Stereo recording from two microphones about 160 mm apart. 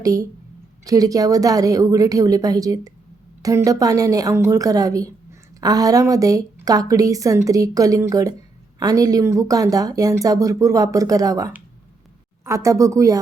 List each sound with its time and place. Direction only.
0.0 s speech: 20° right (ahead or behind)